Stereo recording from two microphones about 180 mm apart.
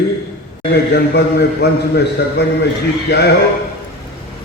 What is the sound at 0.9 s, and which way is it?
A man's voice, 70° left (ahead or behind).